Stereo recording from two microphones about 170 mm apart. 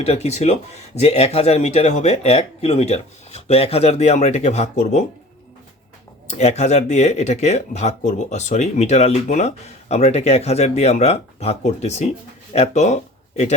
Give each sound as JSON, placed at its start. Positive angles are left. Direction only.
{"t": 0.0, "sound": "speech", "side_deg": 40}
{"t": 6.3, "sound": "speech", "side_deg": 40}